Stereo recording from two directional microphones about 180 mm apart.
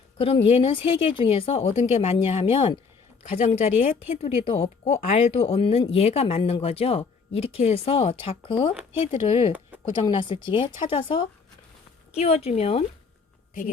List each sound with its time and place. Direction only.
0.2 s speech: 30° left (ahead or behind)